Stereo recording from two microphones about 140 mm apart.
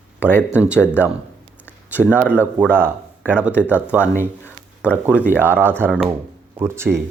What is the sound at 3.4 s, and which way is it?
Speech, 10° right (ahead or behind).